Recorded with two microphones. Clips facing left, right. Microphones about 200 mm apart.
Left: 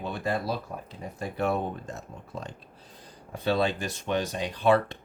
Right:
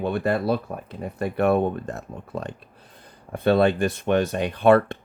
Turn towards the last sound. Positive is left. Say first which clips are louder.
# right 6 dB
turn(degrees=-55)  # may be behind; listen again after turning